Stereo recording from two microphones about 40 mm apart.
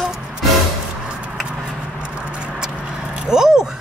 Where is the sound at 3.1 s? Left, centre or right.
Centre.